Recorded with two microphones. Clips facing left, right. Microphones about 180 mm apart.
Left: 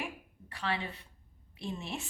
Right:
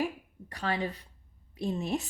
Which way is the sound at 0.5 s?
40° right (ahead or behind).